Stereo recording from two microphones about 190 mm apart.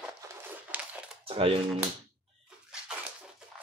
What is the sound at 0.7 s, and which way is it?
Crumpling, 10° right (ahead or behind).